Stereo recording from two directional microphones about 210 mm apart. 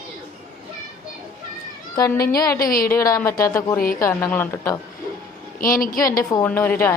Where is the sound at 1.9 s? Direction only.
15° left (ahead or behind).